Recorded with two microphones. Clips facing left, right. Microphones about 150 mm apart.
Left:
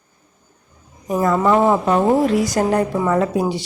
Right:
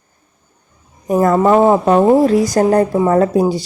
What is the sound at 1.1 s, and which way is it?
Speech, 45° right (ahead or behind).